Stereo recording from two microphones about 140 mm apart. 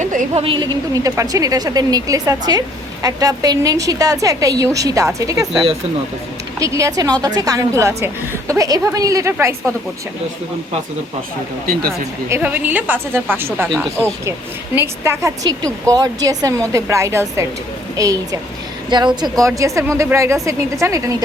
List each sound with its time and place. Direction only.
0.0 s a sound: 70° right (ahead or behind)
0.3 s a woman's voice: 40° right (ahead or behind); by 5.5 s 25° right (ahead or behind)
6.6 s a woman's voice: 25° right (ahead or behind)
11.6 s speech: 90° right
12.3 s a woman's voice: 15° right (ahead or behind)
14.8 s a woman's voice: 15° right (ahead or behind)